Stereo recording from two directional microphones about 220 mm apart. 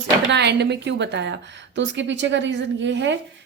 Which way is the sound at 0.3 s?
50° right (ahead or behind).